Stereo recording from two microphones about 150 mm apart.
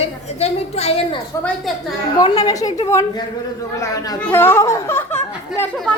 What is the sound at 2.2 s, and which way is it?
A woman's voice, 25° left (ahead or behind).